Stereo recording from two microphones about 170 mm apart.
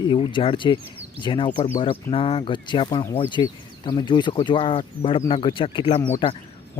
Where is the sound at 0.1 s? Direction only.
30° left (ahead or behind).